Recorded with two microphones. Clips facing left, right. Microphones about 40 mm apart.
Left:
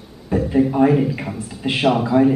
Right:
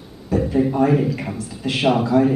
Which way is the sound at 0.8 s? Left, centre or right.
Left.